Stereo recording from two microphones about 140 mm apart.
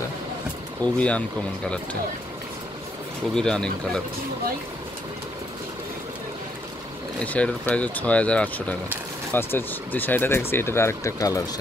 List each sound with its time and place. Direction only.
0.9 s speech: 10° left (ahead or behind)
3.3 s speech: 5° left (ahead or behind)
7.2 s speech: 10° left (ahead or behind)